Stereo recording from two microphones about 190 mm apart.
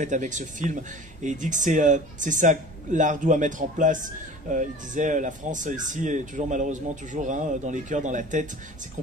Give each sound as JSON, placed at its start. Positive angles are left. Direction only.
{"t": 0.0, "sound": "speech", "side_deg": -40}